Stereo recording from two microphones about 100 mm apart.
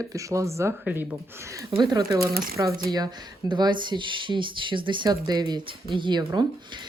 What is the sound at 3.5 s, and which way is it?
Speech, 50° right (ahead or behind).